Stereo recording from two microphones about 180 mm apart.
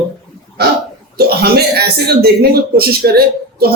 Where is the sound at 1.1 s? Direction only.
60° right (ahead or behind).